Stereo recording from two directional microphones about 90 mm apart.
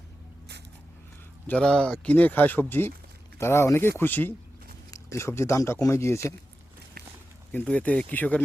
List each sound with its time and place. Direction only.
1.5 s speech: 10° left (ahead or behind)
4.9 s speech: 35° left (ahead or behind)
7.5 s speech: 20° left (ahead or behind)